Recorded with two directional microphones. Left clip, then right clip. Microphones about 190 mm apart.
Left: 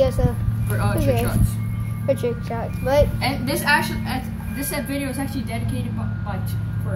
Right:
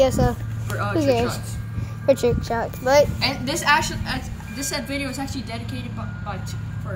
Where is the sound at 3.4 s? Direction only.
20° right (ahead or behind).